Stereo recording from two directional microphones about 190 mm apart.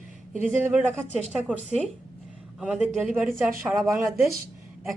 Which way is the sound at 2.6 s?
5° right (ahead or behind).